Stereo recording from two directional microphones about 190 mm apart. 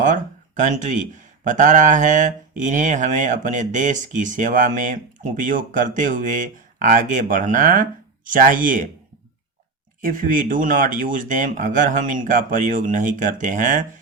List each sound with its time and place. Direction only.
0.0 s speech: 45° right (ahead or behind)
10.0 s speech: 45° right (ahead or behind)